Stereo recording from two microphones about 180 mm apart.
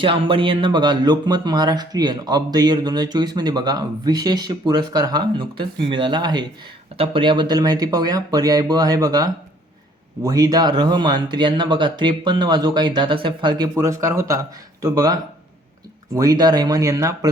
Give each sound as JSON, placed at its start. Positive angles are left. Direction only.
{"t": 0.0, "sound": "speech", "side_deg": -30}